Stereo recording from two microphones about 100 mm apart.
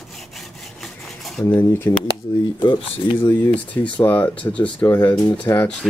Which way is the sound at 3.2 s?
15° left (ahead or behind).